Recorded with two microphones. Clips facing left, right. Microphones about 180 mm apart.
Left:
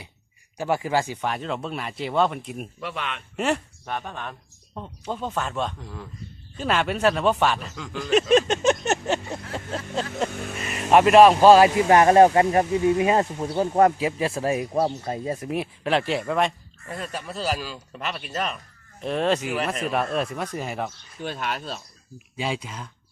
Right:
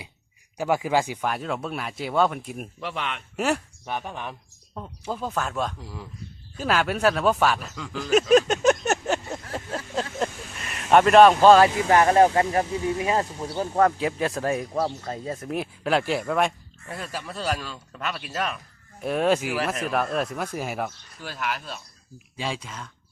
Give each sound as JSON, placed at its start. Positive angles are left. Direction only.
{"t": 0.5, "sound": "speech", "side_deg": -15}
{"t": 10.7, "sound": "speech", "side_deg": 5}
{"t": 11.9, "sound": "speech", "side_deg": 25}
{"t": 14.0, "sound": "speech", "side_deg": 5}
{"t": 15.5, "sound": "speech", "side_deg": 0}
{"t": 21.2, "sound": "speech", "side_deg": 25}
{"t": 22.4, "sound": "speech", "side_deg": 5}